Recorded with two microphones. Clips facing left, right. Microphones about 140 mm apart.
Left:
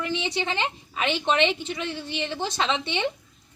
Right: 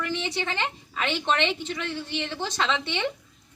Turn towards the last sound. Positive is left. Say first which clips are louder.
# left 1 dB
turn(degrees=15)  # may be behind; listen again after turning